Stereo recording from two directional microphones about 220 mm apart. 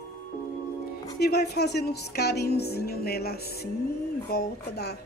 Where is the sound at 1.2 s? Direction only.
45° left (ahead or behind).